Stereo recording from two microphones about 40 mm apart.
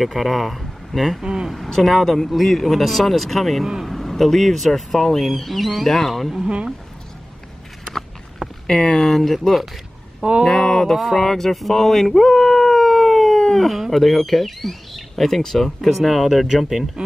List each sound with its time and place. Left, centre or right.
0.0 s speech: centre
1.2 s speech: centre
1.7 s speech: centre
8.4 s a sound: centre
8.7 s speech: left
9.0 s speech: centre
10.4 s speech: centre
10.9 s speech: centre
11.2 s speech: centre